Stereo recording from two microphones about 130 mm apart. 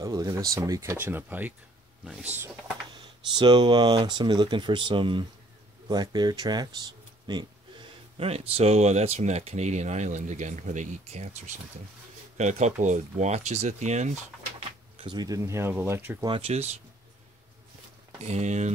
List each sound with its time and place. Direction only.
0.0 s speech: 25° right (ahead or behind)
3.3 s speech: 35° right (ahead or behind)
8.2 s speech: 50° right (ahead or behind)
14.6 s speech: 35° right (ahead or behind); by 16.2 s 15° right (ahead or behind)
16.3 s speech: 45° right (ahead or behind)
18.2 s speech: 60° right (ahead or behind)